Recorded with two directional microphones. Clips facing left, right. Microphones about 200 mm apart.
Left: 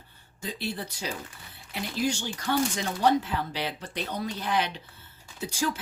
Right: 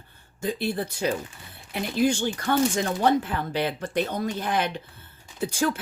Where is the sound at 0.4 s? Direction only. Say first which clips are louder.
Right 7 dB; 50° right (ahead or behind).